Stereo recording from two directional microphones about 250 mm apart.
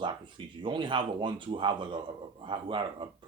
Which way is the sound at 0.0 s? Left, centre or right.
Centre.